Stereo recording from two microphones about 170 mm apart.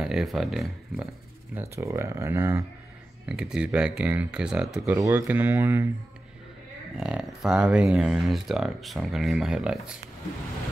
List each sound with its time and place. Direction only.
0.0 s speech: 5° right (ahead or behind)
1.5 s speech: 15° right (ahead or behind)
3.3 s speech: 5° right (ahead or behind)
4.8 s speech: 15° right (ahead or behind)
7.0 s speech: 5° right (ahead or behind)